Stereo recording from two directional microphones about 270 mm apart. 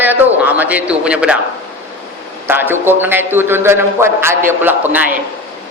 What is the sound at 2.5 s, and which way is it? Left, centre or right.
A man's voice, centre.